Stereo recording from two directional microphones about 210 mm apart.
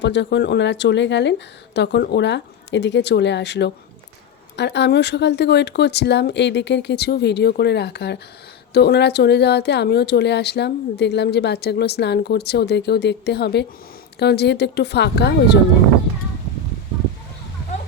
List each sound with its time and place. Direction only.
0.0 s speech: 55° left (ahead or behind)